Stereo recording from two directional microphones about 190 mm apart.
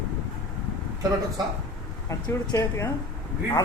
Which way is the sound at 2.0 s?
15° left (ahead or behind).